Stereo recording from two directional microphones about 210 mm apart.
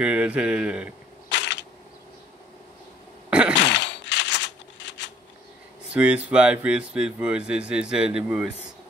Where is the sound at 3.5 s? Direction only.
60° left (ahead or behind).